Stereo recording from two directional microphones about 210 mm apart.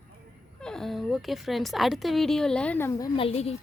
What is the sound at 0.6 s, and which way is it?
A woman's voice, 5° left (ahead or behind).